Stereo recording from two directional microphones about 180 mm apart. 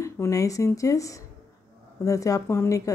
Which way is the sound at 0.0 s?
15° left (ahead or behind).